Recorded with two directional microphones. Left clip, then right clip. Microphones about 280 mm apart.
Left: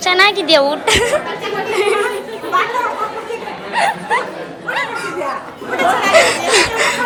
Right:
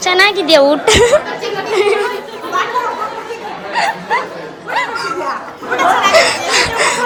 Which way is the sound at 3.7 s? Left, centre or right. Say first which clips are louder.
Even; centre.